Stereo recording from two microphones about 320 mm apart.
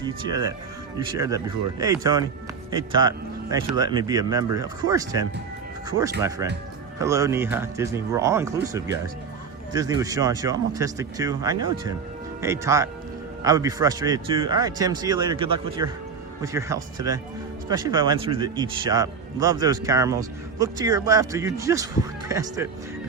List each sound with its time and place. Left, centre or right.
0.0 s speech: centre